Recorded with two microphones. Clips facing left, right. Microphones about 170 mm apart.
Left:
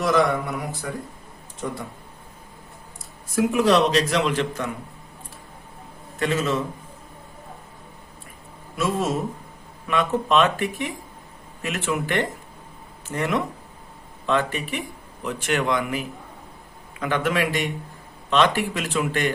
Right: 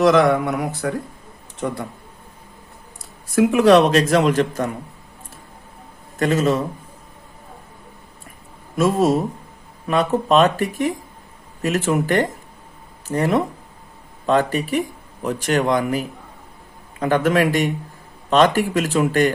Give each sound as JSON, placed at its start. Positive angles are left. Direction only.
{"t": 0.0, "sound": "speech", "side_deg": -70}
{"t": 3.3, "sound": "speech", "side_deg": -60}
{"t": 6.1, "sound": "speech", "side_deg": -40}
{"t": 8.8, "sound": "speech", "side_deg": -40}